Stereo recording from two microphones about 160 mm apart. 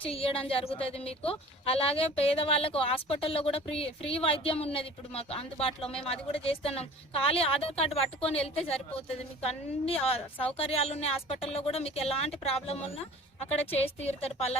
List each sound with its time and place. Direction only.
0.1 s a woman's voice: 35° left (ahead or behind)
14.0 s a woman's voice: 40° left (ahead or behind)